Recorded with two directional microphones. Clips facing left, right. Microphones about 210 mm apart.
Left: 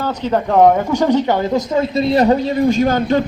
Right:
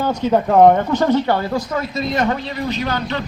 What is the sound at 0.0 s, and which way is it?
A man's voice, 10° right (ahead or behind).